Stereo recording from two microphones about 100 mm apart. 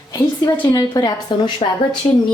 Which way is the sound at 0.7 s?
40° left (ahead or behind).